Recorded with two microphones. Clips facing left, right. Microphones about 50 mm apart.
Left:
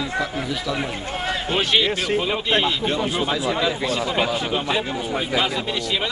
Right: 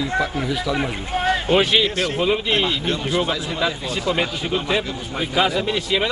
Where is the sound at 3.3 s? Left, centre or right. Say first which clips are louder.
Left 4 dB; left.